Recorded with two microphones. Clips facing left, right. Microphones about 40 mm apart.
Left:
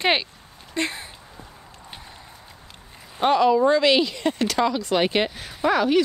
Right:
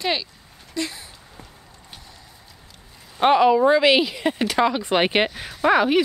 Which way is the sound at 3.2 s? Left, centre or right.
Right.